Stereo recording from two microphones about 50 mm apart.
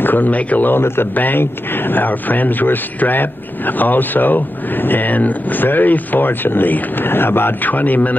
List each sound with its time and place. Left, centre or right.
0.0 s speech: left
0.7 s speech: left
1.1 s speech: left